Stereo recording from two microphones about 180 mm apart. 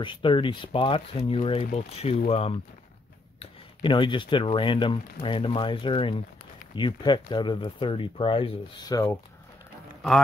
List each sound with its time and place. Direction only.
0.0 s speech: 25° left (ahead or behind)